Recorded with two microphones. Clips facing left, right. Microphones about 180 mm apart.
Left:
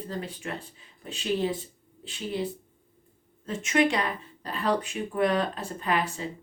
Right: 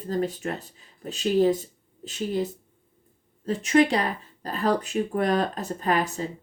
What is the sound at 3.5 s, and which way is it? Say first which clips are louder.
Speech: right 4 dB; 35° right (ahead or behind).